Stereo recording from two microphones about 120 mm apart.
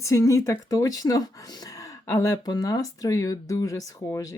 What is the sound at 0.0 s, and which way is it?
Speech, 25° left (ahead or behind).